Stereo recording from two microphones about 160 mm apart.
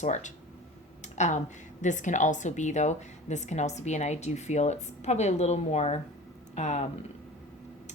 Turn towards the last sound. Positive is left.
turn(degrees=45)  # may be behind; listen again after turning